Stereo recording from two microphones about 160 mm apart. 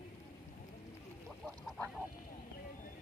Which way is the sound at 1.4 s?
5° left (ahead or behind).